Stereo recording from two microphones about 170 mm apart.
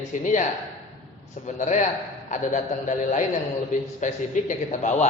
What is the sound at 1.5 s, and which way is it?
A man's voice, 45° left (ahead or behind).